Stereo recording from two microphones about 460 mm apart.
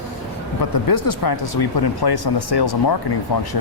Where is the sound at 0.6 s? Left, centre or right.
Left.